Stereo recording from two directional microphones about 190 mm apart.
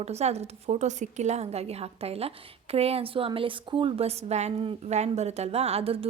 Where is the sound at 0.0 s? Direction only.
35° right (ahead or behind).